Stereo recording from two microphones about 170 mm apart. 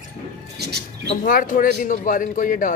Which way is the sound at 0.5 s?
75° right (ahead or behind).